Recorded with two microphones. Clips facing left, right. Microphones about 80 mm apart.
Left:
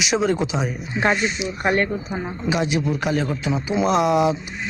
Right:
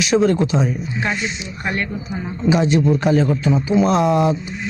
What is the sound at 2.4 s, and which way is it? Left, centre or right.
Speech, centre.